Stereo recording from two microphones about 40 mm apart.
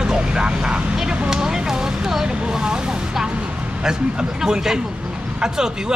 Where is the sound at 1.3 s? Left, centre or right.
Centre.